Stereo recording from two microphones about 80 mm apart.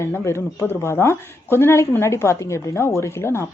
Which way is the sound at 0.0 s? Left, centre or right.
Left.